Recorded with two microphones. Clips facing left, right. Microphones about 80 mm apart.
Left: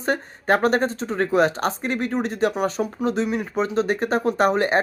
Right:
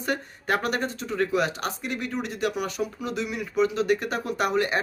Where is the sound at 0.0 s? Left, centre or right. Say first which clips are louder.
Left 5 dB; left.